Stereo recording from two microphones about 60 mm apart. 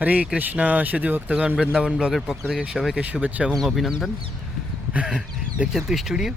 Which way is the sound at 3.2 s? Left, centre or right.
Right.